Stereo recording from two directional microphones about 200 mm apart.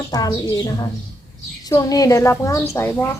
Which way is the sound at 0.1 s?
20° left (ahead or behind).